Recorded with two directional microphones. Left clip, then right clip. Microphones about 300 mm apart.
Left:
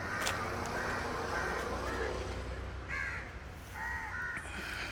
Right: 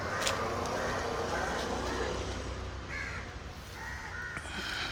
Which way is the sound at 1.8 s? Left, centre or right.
Right.